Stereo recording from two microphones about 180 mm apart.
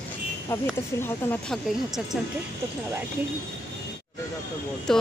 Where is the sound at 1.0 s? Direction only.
10° left (ahead or behind).